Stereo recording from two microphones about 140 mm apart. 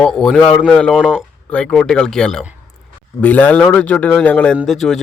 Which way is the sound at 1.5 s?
5° left (ahead or behind).